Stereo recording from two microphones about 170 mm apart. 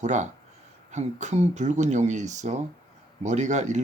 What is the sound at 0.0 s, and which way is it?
Speech, 45° right (ahead or behind).